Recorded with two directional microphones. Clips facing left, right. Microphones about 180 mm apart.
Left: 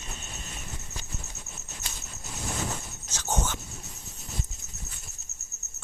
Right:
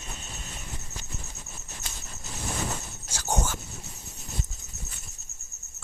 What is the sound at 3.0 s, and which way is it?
Whispering, 10° right (ahead or behind).